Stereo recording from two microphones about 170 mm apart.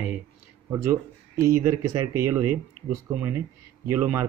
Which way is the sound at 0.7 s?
15° right (ahead or behind).